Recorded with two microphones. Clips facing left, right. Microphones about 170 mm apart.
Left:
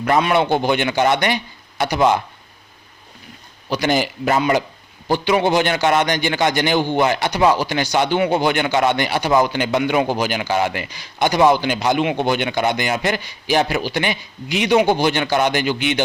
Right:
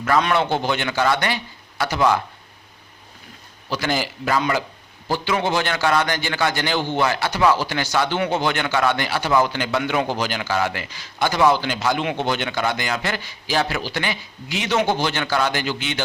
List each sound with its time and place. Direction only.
0.2 s a man's voice: 15° left (ahead or behind)
3.7 s a man's voice: 20° left (ahead or behind)